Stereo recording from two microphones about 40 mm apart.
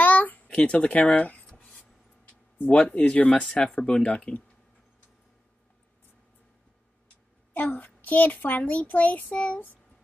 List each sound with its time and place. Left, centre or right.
0.0 s a sound: left
0.5 s speech: left
2.7 s speech: left
3.3 s speech: left
7.5 s a child's voice: left